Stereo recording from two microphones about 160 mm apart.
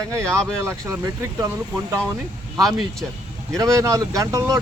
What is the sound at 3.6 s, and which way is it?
Speech, 20° right (ahead or behind).